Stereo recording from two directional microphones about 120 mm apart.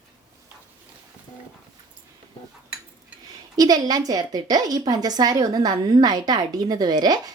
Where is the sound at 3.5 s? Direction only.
30° right (ahead or behind).